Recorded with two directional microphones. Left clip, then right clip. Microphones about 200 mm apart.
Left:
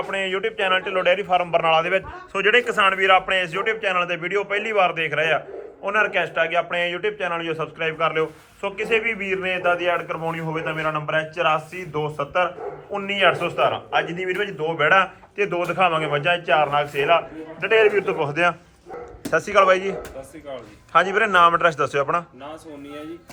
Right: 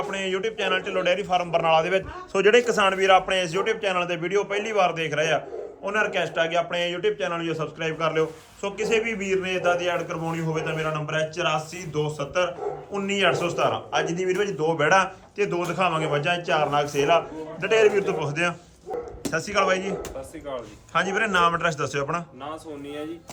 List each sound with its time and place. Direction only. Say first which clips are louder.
0.1 s a man's voice: left 3 dB; 15° right (ahead or behind)
4.8 s a man's voice: left 2 dB; 20° right (ahead or behind)
9.3 s a man's voice: even; 5° right (ahead or behind)